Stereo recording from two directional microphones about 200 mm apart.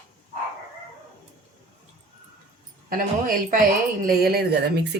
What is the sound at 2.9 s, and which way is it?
A woman's voice, 45° right (ahead or behind).